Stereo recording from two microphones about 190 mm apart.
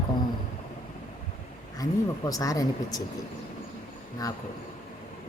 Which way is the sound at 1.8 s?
20° left (ahead or behind).